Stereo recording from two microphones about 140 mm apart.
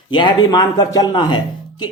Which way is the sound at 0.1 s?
35° left (ahead or behind).